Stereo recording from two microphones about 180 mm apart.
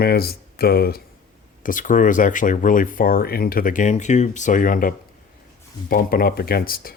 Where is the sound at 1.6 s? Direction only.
50° left (ahead or behind).